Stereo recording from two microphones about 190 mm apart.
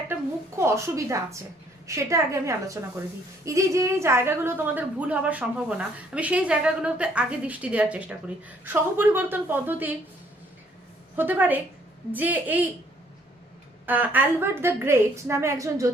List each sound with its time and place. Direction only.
0.1 s a sound: 15° right (ahead or behind)
1.9 s a woman's voice: 15° right (ahead or behind)
11.2 s a woman's voice: 10° right (ahead or behind)
13.8 s a woman's voice: 10° right (ahead or behind)